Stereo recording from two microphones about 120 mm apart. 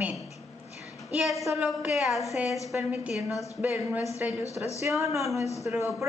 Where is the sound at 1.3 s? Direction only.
Centre (ahead or behind); by 5.0 s 15° right (ahead or behind).